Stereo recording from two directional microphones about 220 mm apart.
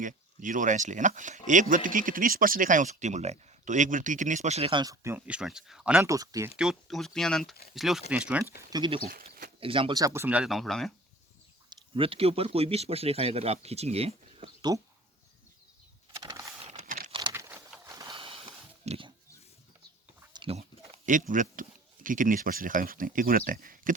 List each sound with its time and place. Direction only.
0.0 s speech: 35° right (ahead or behind); by 6.5 s 15° right (ahead or behind)
6.6 s speech: centre (ahead or behind)
8.7 s speech: 20° right (ahead or behind); by 10.9 s centre (ahead or behind)
11.7 s speech: 25° right (ahead or behind)
16.1 s vehicle: 15° right (ahead or behind)
16.6 s crumpling: 35° right (ahead or behind)
17.1 s a sound: 20° right (ahead or behind)
17.8 s boat: 15° right (ahead or behind)
18.9 s pig: 25° right (ahead or behind)
20.3 s speech: 25° right (ahead or behind)